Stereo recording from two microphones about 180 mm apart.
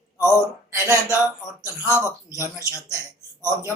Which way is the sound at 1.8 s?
15° left (ahead or behind).